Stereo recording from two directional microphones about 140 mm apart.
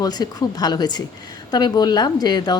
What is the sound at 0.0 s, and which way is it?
A woman's voice, 30° left (ahead or behind).